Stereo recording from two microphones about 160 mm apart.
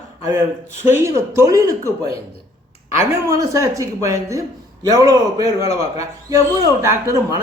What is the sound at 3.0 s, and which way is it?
A man's voice, 20° right (ahead or behind).